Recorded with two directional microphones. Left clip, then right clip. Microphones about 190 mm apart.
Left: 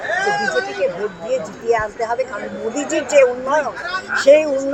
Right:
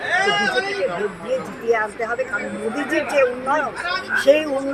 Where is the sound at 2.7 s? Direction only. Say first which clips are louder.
Left 2 dB; 40° left (ahead or behind).